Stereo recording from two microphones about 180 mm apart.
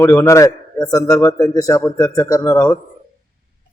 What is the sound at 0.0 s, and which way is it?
A man's voice, 15° left (ahead or behind).